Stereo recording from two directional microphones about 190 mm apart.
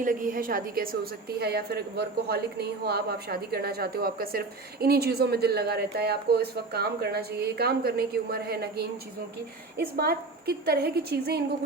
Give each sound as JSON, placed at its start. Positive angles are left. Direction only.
{"t": 0.0, "sound": "a woman's voice", "side_deg": -45}